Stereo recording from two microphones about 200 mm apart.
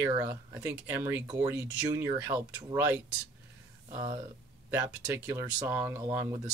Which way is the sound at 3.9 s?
10° right (ahead or behind).